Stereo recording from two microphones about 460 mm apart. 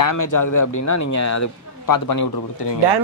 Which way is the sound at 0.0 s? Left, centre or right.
Left.